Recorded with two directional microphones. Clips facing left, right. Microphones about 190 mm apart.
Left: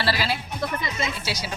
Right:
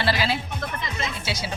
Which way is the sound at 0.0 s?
20° right (ahead or behind).